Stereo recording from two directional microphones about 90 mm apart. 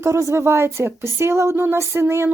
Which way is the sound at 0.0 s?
30° right (ahead or behind).